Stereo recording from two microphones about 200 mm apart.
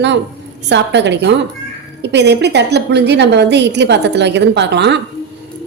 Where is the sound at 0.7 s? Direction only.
60° right (ahead or behind).